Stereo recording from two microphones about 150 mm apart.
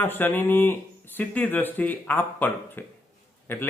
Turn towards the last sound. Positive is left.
turn(degrees=15)  # may be behind; listen again after turning